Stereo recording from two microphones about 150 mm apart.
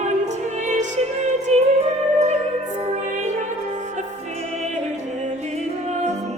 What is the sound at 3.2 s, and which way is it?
Music, 55° right (ahead or behind).